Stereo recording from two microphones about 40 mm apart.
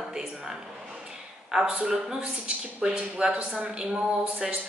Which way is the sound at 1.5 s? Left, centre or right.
Centre.